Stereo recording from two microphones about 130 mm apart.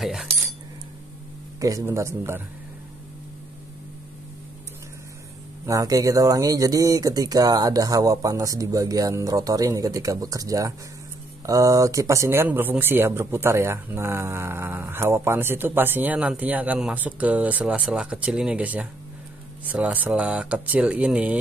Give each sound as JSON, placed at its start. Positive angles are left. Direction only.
{"t": 0.0, "sound": "cutlery", "side_deg": 0}
{"t": 1.6, "sound": "speech", "side_deg": -25}
{"t": 5.7, "sound": "speech", "side_deg": -25}